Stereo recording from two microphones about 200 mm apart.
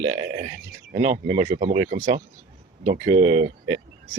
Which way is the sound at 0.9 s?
35° right (ahead or behind).